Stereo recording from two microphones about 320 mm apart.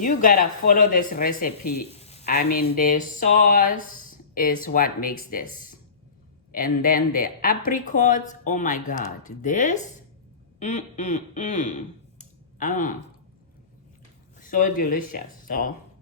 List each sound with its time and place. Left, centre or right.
0.0 s speech: left
6.5 s speech: left
12.2 s a sound: left
14.3 s speech: left